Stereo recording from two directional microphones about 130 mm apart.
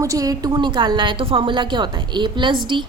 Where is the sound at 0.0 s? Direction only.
25° right (ahead or behind).